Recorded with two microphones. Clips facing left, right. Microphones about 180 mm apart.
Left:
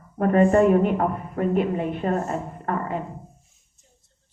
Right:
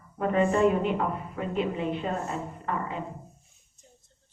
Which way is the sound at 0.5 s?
55° left (ahead or behind).